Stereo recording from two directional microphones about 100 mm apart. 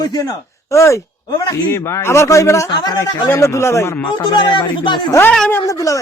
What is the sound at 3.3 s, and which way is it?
Speech, 30° left (ahead or behind).